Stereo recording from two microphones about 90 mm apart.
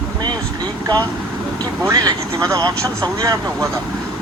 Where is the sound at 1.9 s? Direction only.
45° right (ahead or behind).